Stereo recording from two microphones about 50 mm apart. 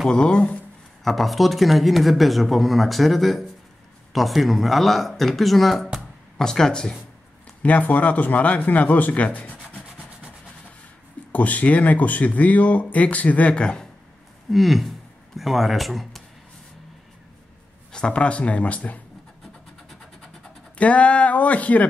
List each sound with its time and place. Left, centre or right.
0.1 s speech: centre
1.0 s speech: centre
7.6 s speech: left
11.3 s speech: left
13.5 s speech: centre
14.5 s speech: centre
17.9 s speech: left
20.7 s speech: left